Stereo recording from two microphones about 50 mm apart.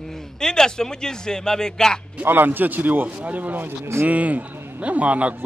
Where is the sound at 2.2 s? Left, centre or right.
Right.